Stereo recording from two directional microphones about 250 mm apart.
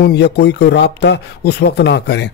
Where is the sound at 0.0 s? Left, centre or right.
Left.